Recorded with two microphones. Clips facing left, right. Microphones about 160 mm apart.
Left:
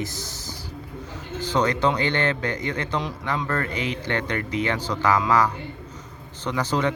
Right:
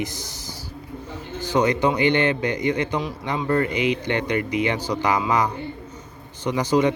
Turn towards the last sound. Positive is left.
turn(degrees=-15)  # may be behind; listen again after turning